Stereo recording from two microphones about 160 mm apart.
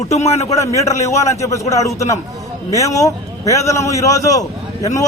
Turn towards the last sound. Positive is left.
turn(degrees=20)  # may be behind; listen again after turning